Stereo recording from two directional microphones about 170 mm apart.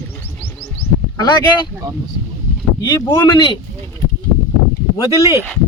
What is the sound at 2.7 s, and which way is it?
Speech, 25° left (ahead or behind).